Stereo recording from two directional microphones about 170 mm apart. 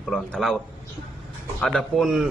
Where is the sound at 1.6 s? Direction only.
Centre (ahead or behind).